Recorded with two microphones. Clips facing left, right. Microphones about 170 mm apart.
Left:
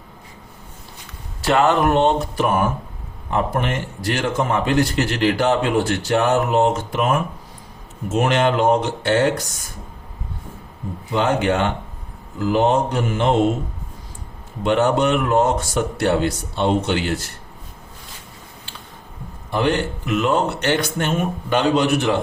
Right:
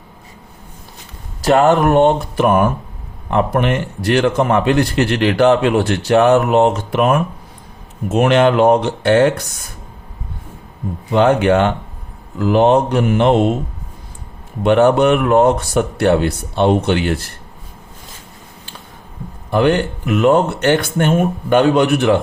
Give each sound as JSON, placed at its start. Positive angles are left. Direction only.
{"t": 1.4, "sound": "a man's voice", "side_deg": -45}
{"t": 11.1, "sound": "a man's voice", "side_deg": -60}
{"t": 14.6, "sound": "a man's voice", "side_deg": -55}
{"t": 19.5, "sound": "speech", "side_deg": -55}